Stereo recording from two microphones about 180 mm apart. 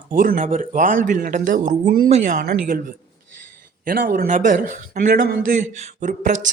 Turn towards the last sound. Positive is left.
turn(degrees=-45)  # may be behind; listen again after turning